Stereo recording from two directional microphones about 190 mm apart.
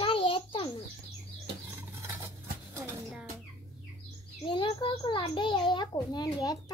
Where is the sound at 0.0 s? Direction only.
30° left (ahead or behind).